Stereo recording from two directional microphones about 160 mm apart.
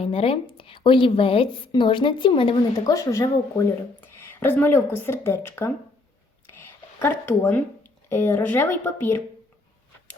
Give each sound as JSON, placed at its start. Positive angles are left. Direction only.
{"t": 0.0, "sound": "a woman's voice", "side_deg": 35}
{"t": 6.7, "sound": "a sound", "side_deg": 15}
{"t": 8.1, "sound": "speech", "side_deg": 10}